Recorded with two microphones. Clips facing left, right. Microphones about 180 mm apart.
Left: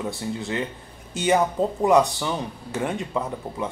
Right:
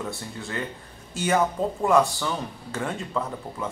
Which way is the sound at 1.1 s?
20° left (ahead or behind).